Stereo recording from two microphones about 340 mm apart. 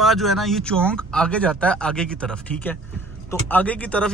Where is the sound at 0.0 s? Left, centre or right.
Centre.